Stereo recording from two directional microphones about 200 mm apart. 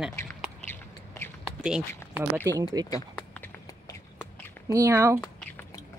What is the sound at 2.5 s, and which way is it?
Speech, 20° right (ahead or behind).